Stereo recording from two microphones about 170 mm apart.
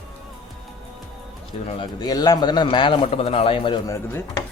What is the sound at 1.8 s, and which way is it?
A man's voice, 25° left (ahead or behind).